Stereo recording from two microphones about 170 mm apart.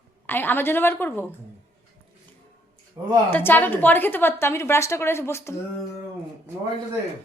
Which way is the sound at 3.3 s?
10° left (ahead or behind).